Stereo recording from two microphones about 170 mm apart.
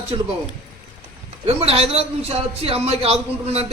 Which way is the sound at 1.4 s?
35° right (ahead or behind).